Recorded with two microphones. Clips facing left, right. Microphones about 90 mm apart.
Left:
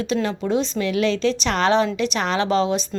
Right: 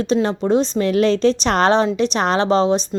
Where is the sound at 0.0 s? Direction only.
30° right (ahead or behind).